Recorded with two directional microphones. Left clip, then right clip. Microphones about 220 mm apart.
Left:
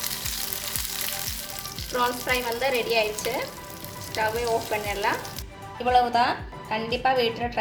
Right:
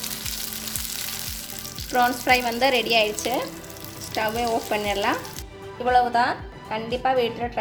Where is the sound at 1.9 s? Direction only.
35° right (ahead or behind).